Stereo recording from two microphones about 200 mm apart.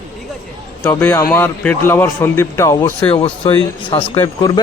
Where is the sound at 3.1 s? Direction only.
30° left (ahead or behind).